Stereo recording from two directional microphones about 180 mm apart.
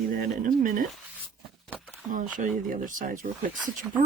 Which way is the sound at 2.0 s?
45° right (ahead or behind).